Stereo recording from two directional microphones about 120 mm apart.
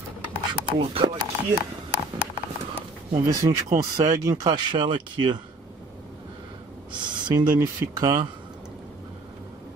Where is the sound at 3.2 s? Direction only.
30° right (ahead or behind).